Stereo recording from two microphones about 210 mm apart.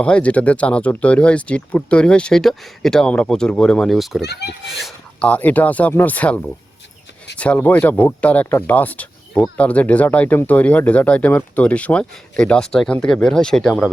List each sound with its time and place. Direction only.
0.0 s speech: 5° left (ahead or behind)
4.2 s a child's voice: 50° left (ahead or behind)
4.6 s speech: centre (ahead or behind)